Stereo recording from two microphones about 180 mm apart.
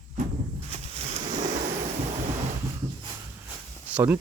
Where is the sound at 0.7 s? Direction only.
35° right (ahead or behind).